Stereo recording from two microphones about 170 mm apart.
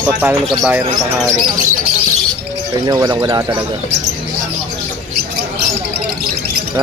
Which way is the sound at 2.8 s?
20° right (ahead or behind).